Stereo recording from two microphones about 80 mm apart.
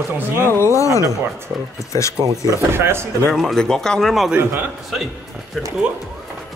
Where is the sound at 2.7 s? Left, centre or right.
Right.